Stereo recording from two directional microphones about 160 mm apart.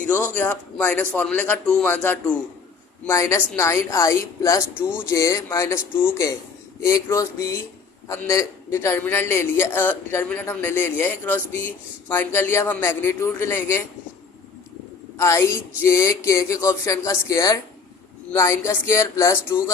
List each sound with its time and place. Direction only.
0.3 s a man's voice: 10° left (ahead or behind)
15.2 s a man's voice: 15° left (ahead or behind)